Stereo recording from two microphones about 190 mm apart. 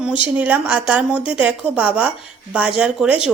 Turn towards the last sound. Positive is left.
turn(degrees=-5)  # may be behind; listen again after turning